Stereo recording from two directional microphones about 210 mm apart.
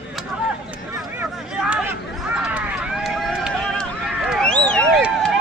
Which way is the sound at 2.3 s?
5° right (ahead or behind).